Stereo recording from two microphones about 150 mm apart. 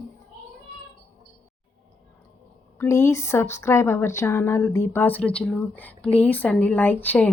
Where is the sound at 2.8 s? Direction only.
20° left (ahead or behind).